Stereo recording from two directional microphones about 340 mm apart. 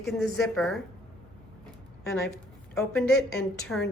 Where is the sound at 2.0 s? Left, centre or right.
Centre.